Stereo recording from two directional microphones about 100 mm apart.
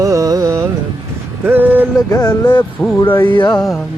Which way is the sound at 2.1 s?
40° left (ahead or behind).